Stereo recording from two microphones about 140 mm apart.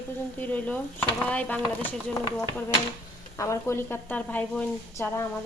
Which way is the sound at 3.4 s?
20° left (ahead or behind).